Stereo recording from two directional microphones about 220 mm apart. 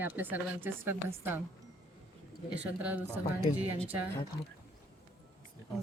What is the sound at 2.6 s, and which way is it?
Speech, 5° right (ahead or behind).